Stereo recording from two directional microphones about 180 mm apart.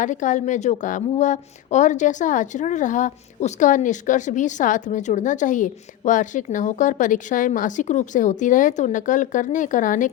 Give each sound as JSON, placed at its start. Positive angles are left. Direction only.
{"t": 0.0, "sound": "a woman's voice", "side_deg": 45}